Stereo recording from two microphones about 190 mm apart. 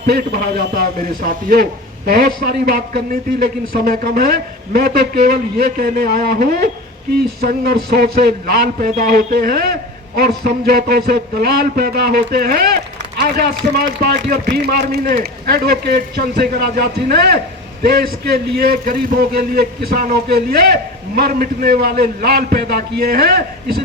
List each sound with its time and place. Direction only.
0.0 s a man's voice: 50° right (ahead or behind)